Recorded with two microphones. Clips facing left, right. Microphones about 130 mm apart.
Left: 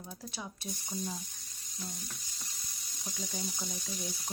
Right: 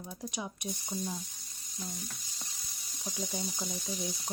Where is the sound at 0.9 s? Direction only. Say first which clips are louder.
Right 1 dB; centre (ahead or behind).